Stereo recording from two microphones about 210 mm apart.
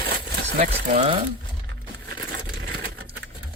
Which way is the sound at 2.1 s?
50° right (ahead or behind).